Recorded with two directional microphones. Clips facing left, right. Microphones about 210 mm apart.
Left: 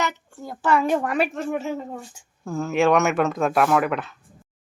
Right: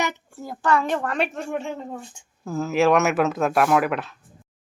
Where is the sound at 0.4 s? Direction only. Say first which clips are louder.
Left 1 dB; 5° left (ahead or behind).